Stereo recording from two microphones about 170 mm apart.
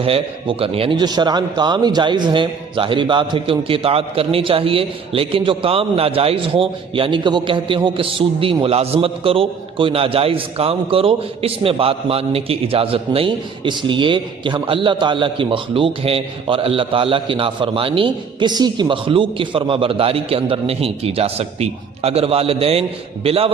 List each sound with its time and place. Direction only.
0.0 s a man's voice: 35° right (ahead or behind)